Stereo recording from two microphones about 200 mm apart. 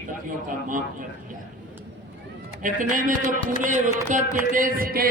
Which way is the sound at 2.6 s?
40° right (ahead or behind).